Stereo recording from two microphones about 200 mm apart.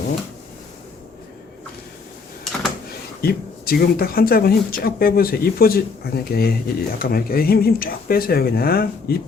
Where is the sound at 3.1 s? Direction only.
50° left (ahead or behind).